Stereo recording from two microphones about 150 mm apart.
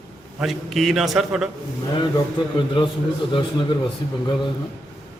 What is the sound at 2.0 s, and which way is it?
Speech, 30° left (ahead or behind).